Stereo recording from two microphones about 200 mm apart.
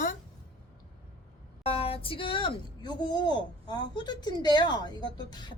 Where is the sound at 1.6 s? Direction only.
30° left (ahead or behind).